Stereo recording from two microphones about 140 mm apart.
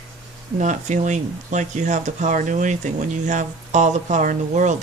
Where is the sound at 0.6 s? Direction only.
60° right (ahead or behind).